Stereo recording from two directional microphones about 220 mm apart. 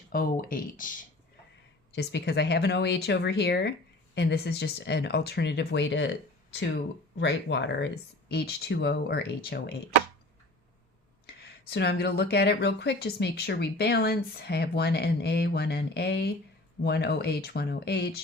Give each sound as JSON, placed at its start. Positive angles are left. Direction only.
{"t": 0.1, "sound": "speech", "side_deg": 40}
{"t": 1.9, "sound": "speech", "side_deg": 50}
{"t": 7.2, "sound": "speech", "side_deg": 55}
{"t": 11.7, "sound": "speech", "side_deg": 50}